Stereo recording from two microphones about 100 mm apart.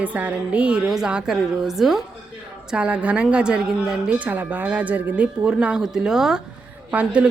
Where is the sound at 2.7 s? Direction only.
15° right (ahead or behind).